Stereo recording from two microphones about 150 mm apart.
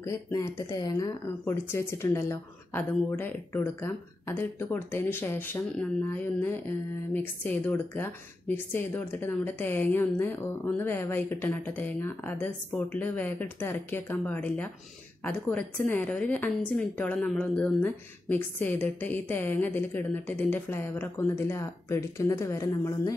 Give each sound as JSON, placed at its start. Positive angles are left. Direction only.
{"t": 0.0, "sound": "speech", "side_deg": 20}